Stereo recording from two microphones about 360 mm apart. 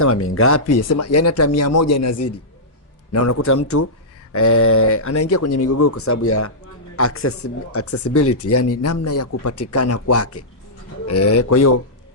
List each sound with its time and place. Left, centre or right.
0.0 s speech: left